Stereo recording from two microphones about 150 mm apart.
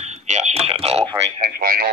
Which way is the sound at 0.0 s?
50° right (ahead or behind).